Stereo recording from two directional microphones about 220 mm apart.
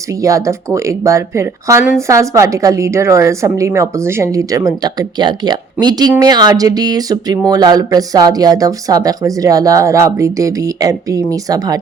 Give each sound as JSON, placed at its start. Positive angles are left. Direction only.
{"t": 0.2, "sound": "speech", "side_deg": -15}